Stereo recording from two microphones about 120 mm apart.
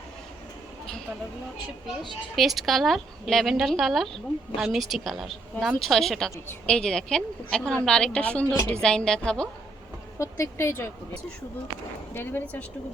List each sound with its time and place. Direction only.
2.3 s a woman's voice: centre (ahead or behind)
10.2 s speech: 25° left (ahead or behind)
12.1 s a woman's voice: 20° left (ahead or behind)